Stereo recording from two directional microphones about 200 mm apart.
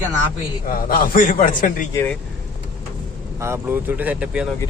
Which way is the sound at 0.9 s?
45° left (ahead or behind).